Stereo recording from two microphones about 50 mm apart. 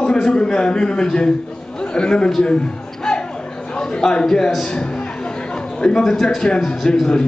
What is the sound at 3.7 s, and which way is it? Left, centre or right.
Speech, centre.